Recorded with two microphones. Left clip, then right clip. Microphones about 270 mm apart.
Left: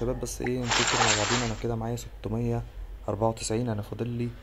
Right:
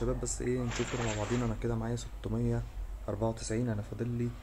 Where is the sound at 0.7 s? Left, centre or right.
Centre.